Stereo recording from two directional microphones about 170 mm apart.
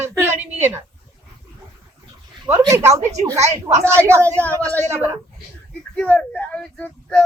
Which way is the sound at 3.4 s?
40° right (ahead or behind).